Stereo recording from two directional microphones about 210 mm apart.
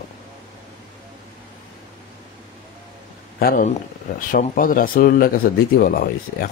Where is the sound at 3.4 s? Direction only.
45° left (ahead or behind).